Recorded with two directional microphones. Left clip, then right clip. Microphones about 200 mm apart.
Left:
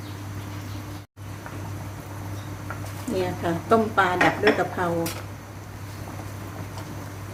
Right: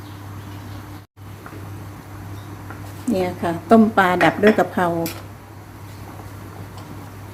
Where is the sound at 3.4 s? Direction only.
35° right (ahead or behind).